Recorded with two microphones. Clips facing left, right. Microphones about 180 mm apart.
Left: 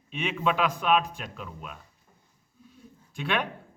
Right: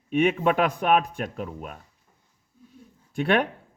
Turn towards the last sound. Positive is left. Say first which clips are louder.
# right 7 dB
turn(degrees=-55)  # may be behind; listen again after turning